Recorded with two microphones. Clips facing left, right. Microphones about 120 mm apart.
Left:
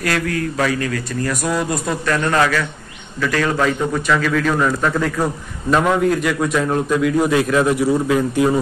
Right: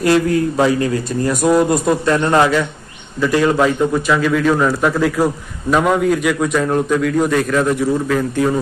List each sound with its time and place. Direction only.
0.0 s a man's voice: 25° right (ahead or behind); by 8.5 s 10° left (ahead or behind)